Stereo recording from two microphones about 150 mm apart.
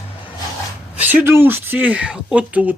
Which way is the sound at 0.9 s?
10° right (ahead or behind).